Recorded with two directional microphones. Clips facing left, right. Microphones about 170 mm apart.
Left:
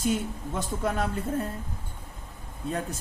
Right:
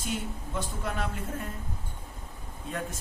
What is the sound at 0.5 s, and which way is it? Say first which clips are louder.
Speech: left 5 dB; 45° left (ahead or behind).